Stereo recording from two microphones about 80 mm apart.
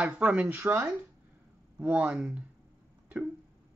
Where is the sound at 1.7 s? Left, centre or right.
Centre.